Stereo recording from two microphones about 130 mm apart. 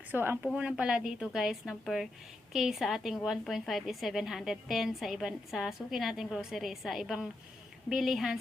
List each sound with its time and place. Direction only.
0.1 s a woman's voice: 15° right (ahead or behind)